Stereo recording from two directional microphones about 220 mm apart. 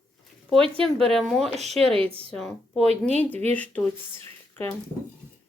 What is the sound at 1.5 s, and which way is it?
Speech, 30° right (ahead or behind).